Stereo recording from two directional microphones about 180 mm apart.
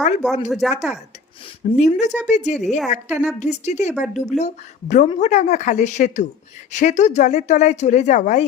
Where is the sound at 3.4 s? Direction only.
40° left (ahead or behind).